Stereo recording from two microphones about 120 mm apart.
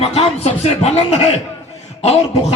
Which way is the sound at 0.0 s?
55° left (ahead or behind).